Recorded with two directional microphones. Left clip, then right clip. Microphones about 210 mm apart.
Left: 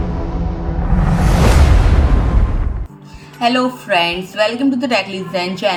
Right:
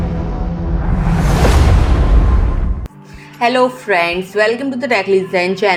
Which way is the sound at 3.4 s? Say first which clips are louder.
Right 3 dB; 30° right (ahead or behind).